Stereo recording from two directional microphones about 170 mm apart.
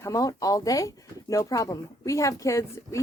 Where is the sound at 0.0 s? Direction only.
20° left (ahead or behind).